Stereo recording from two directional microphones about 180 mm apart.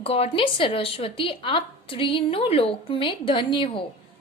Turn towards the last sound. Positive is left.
turn(degrees=30)  # may be behind; listen again after turning